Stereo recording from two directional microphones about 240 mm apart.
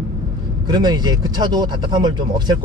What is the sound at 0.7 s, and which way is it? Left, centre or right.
Speech, centre.